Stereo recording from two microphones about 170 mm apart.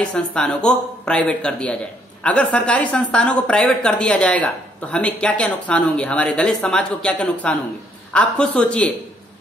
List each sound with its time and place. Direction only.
0.0 s a woman's voice: 5° left (ahead or behind)